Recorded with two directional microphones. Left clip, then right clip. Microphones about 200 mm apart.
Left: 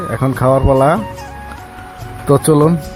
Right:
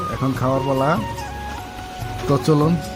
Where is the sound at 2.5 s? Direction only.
35° left (ahead or behind).